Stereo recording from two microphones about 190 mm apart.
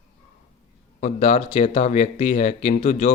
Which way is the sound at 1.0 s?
35° left (ahead or behind).